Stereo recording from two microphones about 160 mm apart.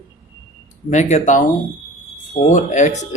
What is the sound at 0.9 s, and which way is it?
Speech, 50° left (ahead or behind).